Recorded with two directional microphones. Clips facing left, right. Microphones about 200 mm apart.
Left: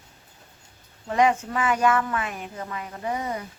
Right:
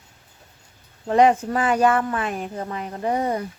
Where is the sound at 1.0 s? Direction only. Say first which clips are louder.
Right 5 dB; 35° right (ahead or behind).